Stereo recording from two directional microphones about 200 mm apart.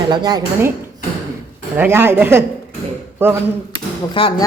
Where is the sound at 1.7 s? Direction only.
10° right (ahead or behind).